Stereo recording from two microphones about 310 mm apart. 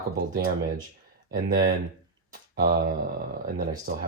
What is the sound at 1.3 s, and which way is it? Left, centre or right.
Speech, right.